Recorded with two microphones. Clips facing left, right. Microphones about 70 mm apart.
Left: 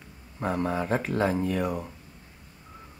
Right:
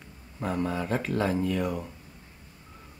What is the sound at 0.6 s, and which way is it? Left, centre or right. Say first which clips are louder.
Speech: left 2 dB; centre.